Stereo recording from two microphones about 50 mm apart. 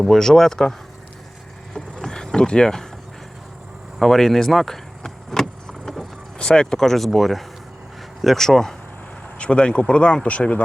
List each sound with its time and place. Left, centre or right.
0.0 s speech: centre
1.7 s vehicle: centre
4.0 s vehicle: centre
8.2 s speech: centre
9.4 s speech: centre